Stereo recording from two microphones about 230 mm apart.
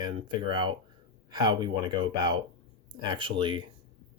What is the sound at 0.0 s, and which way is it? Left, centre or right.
Speech, centre.